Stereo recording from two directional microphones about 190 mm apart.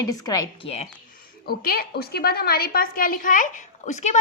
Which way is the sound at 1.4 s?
50° left (ahead or behind).